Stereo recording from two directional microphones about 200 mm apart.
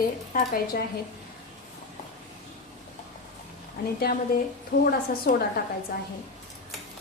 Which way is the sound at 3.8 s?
50° left (ahead or behind).